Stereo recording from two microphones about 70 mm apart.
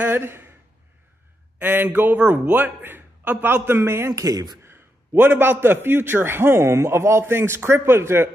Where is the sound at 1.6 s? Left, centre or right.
Right.